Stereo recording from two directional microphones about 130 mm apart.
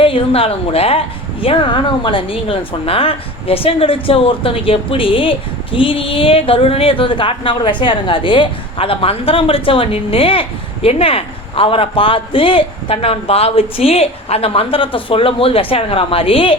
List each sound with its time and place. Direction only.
0.0 s a woman's voice: 45° left (ahead or behind)